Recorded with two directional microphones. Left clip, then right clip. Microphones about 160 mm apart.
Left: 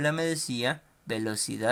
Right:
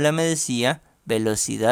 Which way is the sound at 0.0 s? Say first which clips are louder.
Right 7 dB; 50° right (ahead or behind).